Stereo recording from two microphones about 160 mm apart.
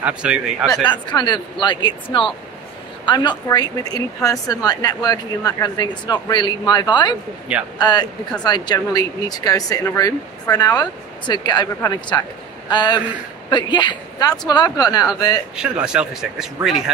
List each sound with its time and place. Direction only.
0.0 s speech: 5° right (ahead or behind)
0.8 s speech: 30° left (ahead or behind)
7.5 s speech: 5° right (ahead or behind)
7.8 s a man's voice: 25° left (ahead or behind)
15.5 s speech: 5° right (ahead or behind)